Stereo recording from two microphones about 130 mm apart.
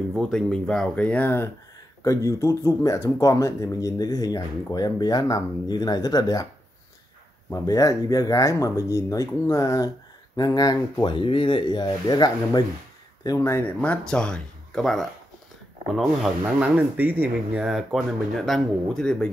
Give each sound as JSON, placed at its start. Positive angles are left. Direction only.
{"t": 0.1, "sound": "speech", "side_deg": 5}
{"t": 7.5, "sound": "speech", "side_deg": 25}
{"t": 13.4, "sound": "speech", "side_deg": 20}
{"t": 16.5, "sound": "speech", "side_deg": -10}